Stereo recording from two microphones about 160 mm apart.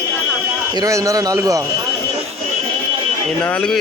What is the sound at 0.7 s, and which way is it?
Speech, 20° right (ahead or behind).